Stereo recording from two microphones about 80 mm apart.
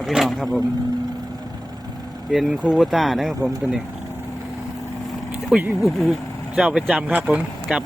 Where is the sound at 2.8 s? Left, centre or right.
Centre.